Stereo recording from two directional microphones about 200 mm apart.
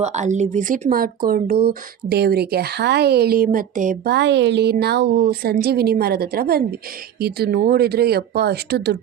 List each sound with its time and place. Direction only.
0.0 s speech: 35° right (ahead or behind); by 9.0 s 55° right (ahead or behind)